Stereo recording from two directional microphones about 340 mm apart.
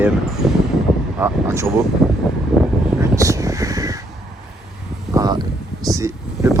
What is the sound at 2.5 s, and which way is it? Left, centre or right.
Crow, centre.